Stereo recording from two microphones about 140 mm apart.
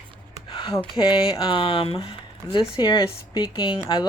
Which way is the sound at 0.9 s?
30° left (ahead or behind).